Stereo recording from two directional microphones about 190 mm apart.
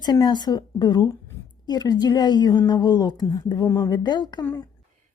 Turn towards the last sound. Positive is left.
turn(degrees=20)  # may be behind; listen again after turning